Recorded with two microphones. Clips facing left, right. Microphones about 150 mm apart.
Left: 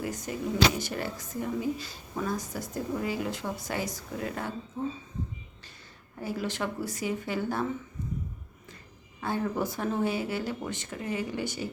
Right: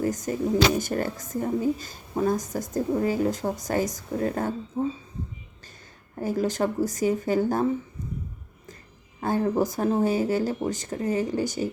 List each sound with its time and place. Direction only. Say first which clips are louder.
0.0 s a woman's voice: right 7 dB; 45° right (ahead or behind)
6.1 s a woman's voice: right 7 dB; 45° right (ahead or behind)
9.2 s speech: right 6 dB; 40° right (ahead or behind)